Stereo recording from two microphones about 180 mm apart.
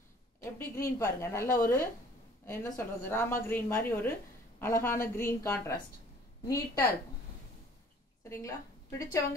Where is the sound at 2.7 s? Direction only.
15° left (ahead or behind).